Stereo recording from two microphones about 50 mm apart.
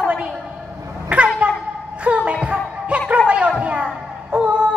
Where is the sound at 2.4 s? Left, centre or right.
Right.